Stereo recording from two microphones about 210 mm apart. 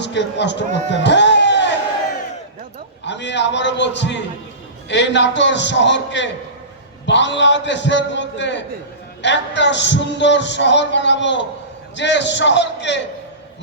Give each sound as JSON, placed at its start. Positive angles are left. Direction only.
{"t": 0.0, "sound": "a man's voice", "side_deg": 55}
{"t": 1.0, "sound": "music", "side_deg": 55}
{"t": 3.0, "sound": "speech", "side_deg": 55}